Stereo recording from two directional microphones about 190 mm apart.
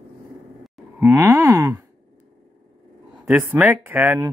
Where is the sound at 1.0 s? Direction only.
10° right (ahead or behind).